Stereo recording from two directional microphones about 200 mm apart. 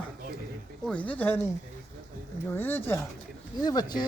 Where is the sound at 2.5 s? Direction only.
10° left (ahead or behind).